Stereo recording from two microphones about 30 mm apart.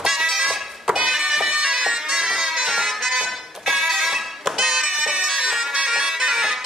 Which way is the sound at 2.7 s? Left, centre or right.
Centre.